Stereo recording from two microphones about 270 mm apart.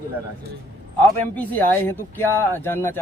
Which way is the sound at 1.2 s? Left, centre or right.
Centre.